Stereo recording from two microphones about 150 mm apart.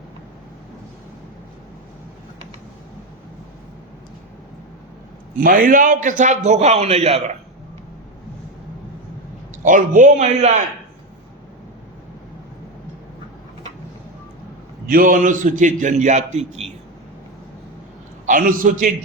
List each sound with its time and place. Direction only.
5.4 s a man's voice: 70° right (ahead or behind); by 7.2 s 45° right (ahead or behind)
9.6 s a man's voice: 60° right (ahead or behind)
14.8 s a man's voice: 70° right (ahead or behind); by 16.7 s 45° right (ahead or behind)
18.3 s a man's voice: 65° right (ahead or behind)